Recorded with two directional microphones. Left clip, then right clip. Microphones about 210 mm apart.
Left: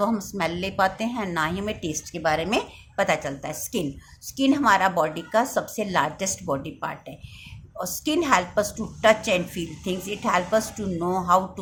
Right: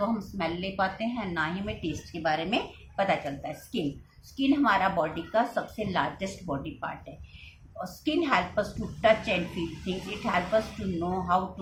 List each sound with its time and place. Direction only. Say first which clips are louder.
0.0 s a woman's voice: left 5 dB; 55° left (ahead or behind)